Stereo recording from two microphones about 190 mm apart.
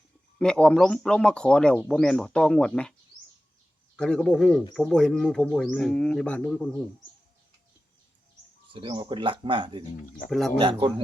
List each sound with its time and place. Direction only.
0.3 s speech: 5° left (ahead or behind)
3.9 s speech: 5° left (ahead or behind)
8.7 s speech: 25° right (ahead or behind)
10.2 s speech: centre (ahead or behind)
10.6 s speech: 25° right (ahead or behind)